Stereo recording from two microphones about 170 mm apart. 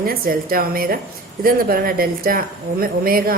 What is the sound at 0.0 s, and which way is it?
Speech, 60° right (ahead or behind).